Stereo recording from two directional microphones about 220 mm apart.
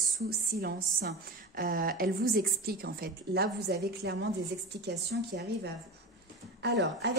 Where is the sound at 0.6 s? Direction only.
45° right (ahead or behind).